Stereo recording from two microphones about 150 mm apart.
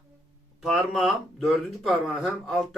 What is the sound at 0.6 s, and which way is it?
A man's voice, centre (ahead or behind).